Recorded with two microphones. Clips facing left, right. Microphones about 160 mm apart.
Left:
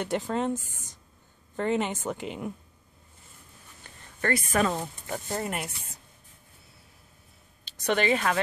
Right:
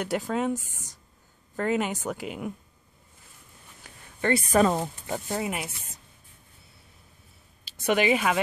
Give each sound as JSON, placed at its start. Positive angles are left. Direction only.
{"t": 0.0, "sound": "speech", "side_deg": -5}
{"t": 1.6, "sound": "speech", "side_deg": -5}
{"t": 4.2, "sound": "speech", "side_deg": -15}
{"t": 5.3, "sound": "speech", "side_deg": -5}
{"t": 7.8, "sound": "speech", "side_deg": -10}